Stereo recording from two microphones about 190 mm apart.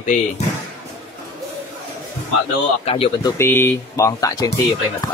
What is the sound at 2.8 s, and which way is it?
Speech, 30° left (ahead or behind).